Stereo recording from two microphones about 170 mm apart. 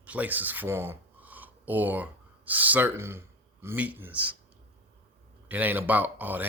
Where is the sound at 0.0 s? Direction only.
10° right (ahead or behind).